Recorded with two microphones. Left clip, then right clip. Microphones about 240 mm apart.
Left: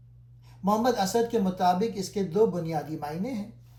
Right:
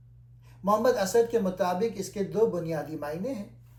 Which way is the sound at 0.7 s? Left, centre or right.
Left.